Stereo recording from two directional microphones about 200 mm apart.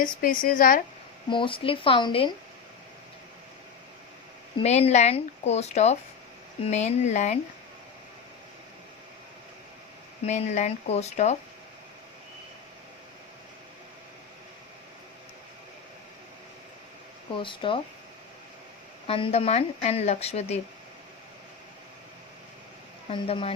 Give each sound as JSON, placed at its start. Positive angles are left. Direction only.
{"t": 0.0, "sound": "a woman's voice", "side_deg": 45}
{"t": 1.3, "sound": "speech", "side_deg": 25}
{"t": 4.6, "sound": "speech", "side_deg": 35}
{"t": 10.2, "sound": "speech", "side_deg": 35}
{"t": 17.3, "sound": "speech", "side_deg": 25}
{"t": 19.0, "sound": "speech", "side_deg": 30}
{"t": 23.0, "sound": "speech", "side_deg": 30}